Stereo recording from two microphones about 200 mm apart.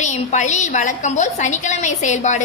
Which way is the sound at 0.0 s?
35° left (ahead or behind).